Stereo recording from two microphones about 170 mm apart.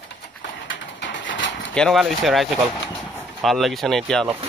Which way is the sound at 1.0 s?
90° left.